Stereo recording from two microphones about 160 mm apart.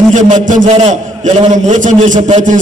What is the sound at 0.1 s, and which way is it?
A man's voice, 50° right (ahead or behind).